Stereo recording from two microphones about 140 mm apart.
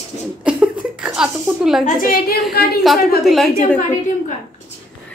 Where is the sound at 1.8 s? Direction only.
85° left.